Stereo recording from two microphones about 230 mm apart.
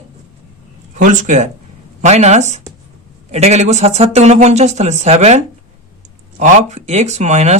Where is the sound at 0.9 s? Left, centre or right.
Right.